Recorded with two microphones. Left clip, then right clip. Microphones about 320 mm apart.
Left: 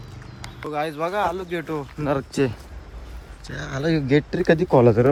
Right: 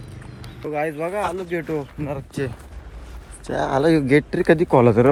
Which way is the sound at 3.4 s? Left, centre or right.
Centre.